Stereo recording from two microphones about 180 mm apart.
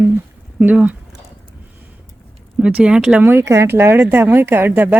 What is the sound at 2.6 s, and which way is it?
Speech, 5° right (ahead or behind).